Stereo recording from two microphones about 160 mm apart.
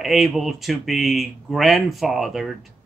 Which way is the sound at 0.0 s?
Centre (ahead or behind).